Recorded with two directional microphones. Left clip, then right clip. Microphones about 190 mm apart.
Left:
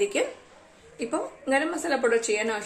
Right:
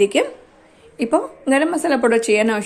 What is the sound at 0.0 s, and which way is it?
A woman's voice, 45° right (ahead or behind).